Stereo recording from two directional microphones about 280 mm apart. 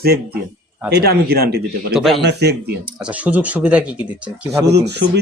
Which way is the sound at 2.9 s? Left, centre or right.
Centre.